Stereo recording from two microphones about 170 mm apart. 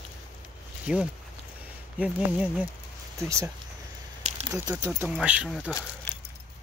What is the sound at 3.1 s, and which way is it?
Speech, 15° right (ahead or behind).